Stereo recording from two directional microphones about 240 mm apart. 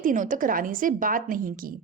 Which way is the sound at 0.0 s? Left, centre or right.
Right.